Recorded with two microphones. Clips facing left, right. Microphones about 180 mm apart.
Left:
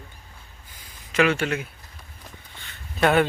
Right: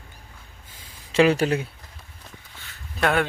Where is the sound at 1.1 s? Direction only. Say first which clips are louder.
Right 3 dB; 35° right (ahead or behind).